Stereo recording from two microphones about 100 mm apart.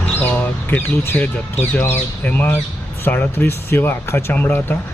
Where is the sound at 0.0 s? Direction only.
20° left (ahead or behind).